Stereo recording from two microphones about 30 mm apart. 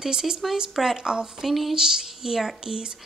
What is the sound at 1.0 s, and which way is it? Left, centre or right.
Speech, right.